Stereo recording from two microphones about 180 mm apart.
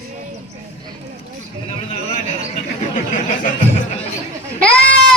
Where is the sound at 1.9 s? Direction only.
35° left (ahead or behind).